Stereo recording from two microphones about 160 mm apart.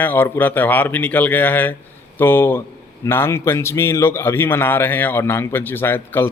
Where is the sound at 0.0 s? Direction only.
10° left (ahead or behind).